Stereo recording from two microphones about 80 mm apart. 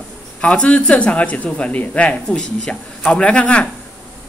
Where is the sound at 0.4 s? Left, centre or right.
Centre.